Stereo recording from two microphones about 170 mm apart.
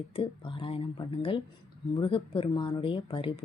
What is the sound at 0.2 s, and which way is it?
Speech, 30° left (ahead or behind).